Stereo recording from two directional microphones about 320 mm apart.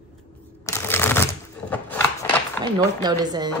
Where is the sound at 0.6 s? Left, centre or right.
Centre.